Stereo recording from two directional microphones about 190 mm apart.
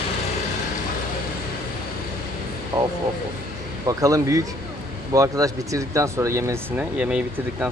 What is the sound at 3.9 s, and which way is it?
Speech, 20° right (ahead or behind).